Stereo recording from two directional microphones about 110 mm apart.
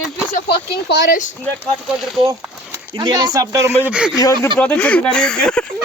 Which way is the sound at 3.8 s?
10° right (ahead or behind).